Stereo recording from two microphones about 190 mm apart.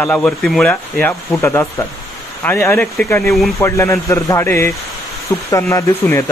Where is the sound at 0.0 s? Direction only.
5° left (ahead or behind).